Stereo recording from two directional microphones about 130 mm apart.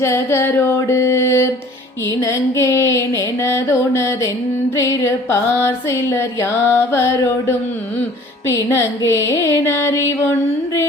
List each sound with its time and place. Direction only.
0.0 s music: 20° left (ahead or behind)
5.3 s music: 20° left (ahead or behind)